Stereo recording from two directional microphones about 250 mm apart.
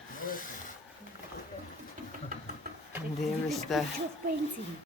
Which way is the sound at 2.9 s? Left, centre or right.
Centre.